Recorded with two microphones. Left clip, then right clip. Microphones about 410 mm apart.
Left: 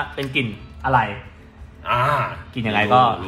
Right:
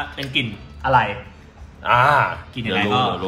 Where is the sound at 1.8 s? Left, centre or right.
Centre.